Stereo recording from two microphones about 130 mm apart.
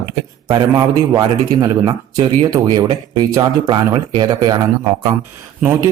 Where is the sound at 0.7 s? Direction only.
25° right (ahead or behind).